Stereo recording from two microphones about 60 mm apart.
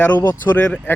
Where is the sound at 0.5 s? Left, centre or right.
Left.